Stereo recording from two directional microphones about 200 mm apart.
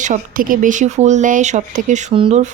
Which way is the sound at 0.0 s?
40° right (ahead or behind).